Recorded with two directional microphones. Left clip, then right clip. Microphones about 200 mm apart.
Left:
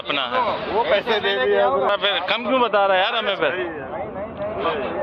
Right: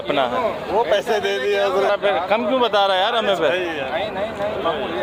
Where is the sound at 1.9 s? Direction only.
Centre (ahead or behind).